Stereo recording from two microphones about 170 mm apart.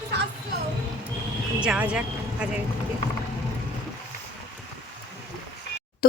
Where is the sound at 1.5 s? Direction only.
5° right (ahead or behind).